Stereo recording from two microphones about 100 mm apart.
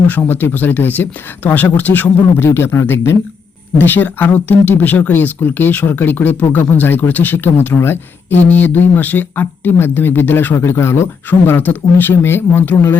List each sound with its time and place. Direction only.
0.1 s speech: 20° left (ahead or behind)